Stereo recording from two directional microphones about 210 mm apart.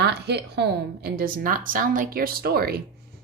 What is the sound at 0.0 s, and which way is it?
A woman's voice, 55° right (ahead or behind).